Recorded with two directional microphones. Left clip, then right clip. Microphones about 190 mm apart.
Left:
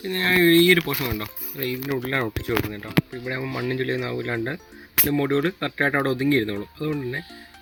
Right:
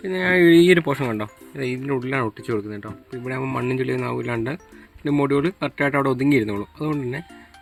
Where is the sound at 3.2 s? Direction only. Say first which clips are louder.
Right 2 dB; 45° right (ahead or behind).